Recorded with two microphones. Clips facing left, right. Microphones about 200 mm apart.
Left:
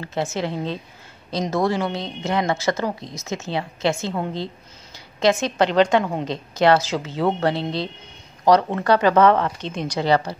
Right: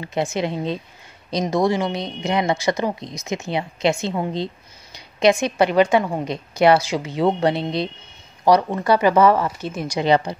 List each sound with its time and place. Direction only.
0.0 s speech: 15° right (ahead or behind)